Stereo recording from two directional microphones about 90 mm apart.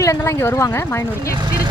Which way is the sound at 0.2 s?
25° left (ahead or behind).